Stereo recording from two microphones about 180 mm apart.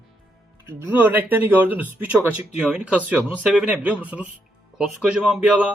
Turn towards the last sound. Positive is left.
turn(degrees=-5)  # may be behind; listen again after turning